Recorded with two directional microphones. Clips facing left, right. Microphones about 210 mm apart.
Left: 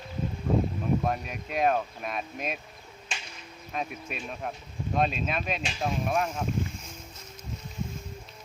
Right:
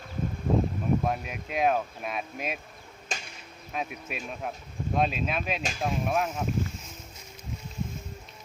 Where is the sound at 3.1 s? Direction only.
40° right (ahead or behind).